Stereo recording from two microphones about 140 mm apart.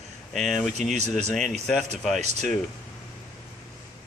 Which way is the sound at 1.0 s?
55° right (ahead or behind).